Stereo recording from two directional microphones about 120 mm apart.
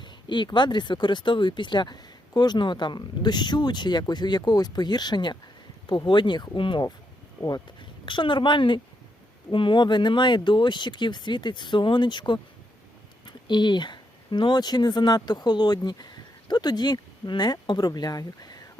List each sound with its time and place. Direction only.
0.0 s speech: 40° left (ahead or behind)